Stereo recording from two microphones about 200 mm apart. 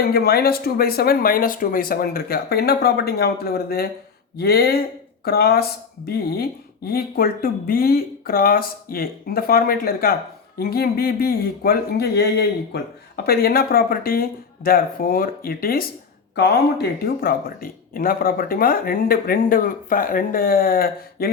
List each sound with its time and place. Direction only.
0.1 s speech: 50° left (ahead or behind)